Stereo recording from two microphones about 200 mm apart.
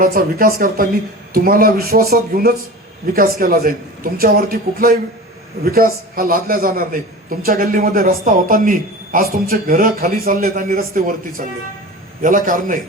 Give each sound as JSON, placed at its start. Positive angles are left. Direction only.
{"t": 0.0, "sound": "a man's voice", "side_deg": -45}